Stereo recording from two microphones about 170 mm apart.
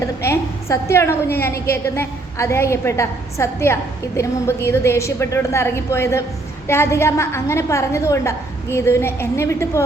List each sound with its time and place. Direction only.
0.0 s a woman's voice: 15° left (ahead or behind)